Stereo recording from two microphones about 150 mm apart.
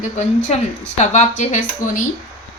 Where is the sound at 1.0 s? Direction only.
55° left (ahead or behind).